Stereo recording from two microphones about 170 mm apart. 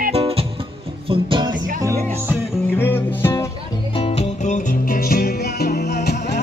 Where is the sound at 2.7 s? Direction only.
15° left (ahead or behind).